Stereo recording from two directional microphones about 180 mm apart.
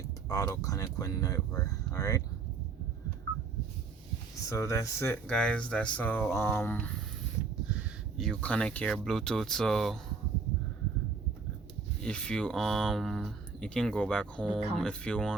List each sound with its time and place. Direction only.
0.3 s speech: 20° left (ahead or behind)
4.4 s speech: 15° left (ahead or behind)
12.0 s speech: 5° left (ahead or behind)